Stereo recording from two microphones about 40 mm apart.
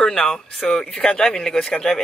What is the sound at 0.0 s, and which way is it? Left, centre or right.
Speech, left.